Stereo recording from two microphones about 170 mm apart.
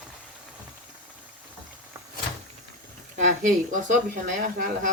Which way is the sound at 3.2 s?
45° right (ahead or behind).